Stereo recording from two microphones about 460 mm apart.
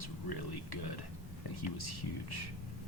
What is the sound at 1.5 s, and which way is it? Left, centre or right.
Speech, left.